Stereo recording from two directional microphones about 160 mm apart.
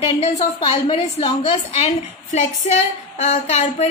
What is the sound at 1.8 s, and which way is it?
A woman's voice, 50° left (ahead or behind).